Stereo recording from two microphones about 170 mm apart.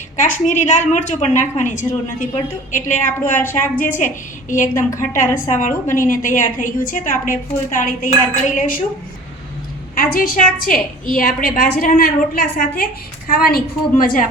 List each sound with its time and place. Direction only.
0.2 s a woman's voice: 50° left (ahead or behind)
3.2 s speech: 10° left (ahead or behind)
3.9 s a woman's voice: 50° left (ahead or behind)
4.7 s speech: 15° left (ahead or behind)
4.9 s a woman's voice: 50° left (ahead or behind)
9.9 s a woman's voice: 60° left (ahead or behind)